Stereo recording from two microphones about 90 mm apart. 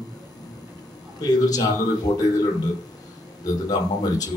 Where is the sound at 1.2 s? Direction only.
45° left (ahead or behind).